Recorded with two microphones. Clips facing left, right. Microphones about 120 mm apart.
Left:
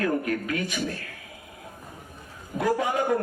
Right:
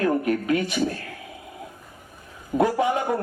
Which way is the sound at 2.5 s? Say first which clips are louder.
Right 8 dB; 40° right (ahead or behind).